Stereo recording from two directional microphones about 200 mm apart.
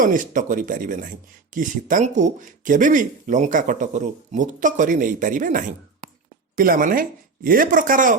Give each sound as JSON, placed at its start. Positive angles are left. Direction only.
{"t": 0.0, "sound": "speech", "side_deg": -40}